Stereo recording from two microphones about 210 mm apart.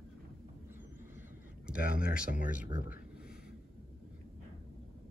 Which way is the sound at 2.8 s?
40° left (ahead or behind).